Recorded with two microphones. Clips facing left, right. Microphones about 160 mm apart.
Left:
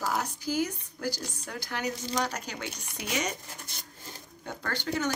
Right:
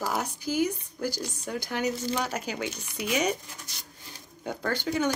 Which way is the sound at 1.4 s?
15° right (ahead or behind).